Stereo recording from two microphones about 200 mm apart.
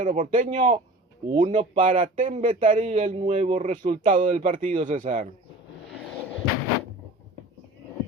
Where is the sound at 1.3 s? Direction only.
40° right (ahead or behind).